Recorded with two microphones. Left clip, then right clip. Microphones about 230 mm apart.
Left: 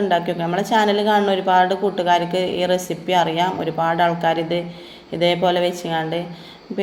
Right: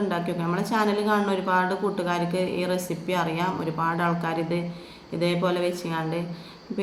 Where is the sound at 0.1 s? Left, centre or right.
Centre.